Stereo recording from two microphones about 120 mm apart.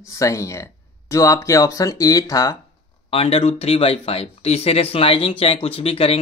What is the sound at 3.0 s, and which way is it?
Speech, 55° left (ahead or behind).